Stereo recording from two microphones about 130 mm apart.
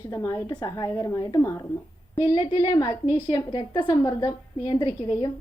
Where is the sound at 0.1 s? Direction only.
25° left (ahead or behind).